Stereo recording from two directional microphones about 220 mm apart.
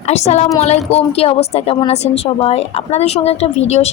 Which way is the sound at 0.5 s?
30° left (ahead or behind).